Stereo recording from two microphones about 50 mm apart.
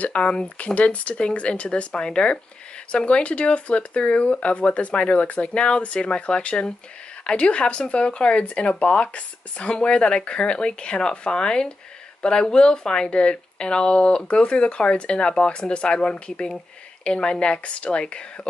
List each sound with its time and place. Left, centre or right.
0.0 s speech: left